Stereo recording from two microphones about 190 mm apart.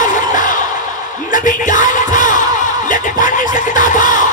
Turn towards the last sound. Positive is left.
turn(degrees=45)  # may be behind; listen again after turning